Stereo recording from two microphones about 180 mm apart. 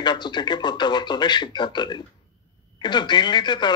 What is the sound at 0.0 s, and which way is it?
Speech, 25° left (ahead or behind).